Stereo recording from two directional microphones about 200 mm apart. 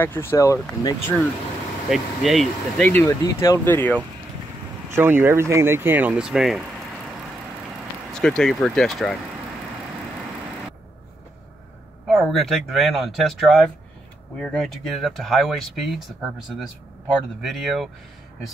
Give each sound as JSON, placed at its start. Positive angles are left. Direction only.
{"t": 0.0, "sound": "speech", "side_deg": 10}
{"t": 1.9, "sound": "speech", "side_deg": 0}
{"t": 4.9, "sound": "speech", "side_deg": -10}
{"t": 8.1, "sound": "speech", "side_deg": 5}
{"t": 12.1, "sound": "speech", "side_deg": 0}
{"t": 17.4, "sound": "speech", "side_deg": 0}